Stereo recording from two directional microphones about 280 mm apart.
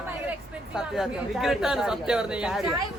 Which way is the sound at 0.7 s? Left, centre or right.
Centre.